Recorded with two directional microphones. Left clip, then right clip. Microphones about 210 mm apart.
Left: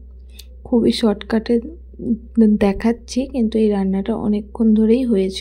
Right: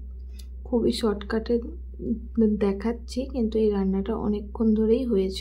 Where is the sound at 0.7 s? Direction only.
30° left (ahead or behind).